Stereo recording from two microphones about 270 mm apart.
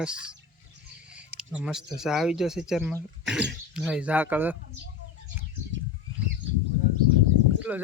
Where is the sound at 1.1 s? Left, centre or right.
Centre.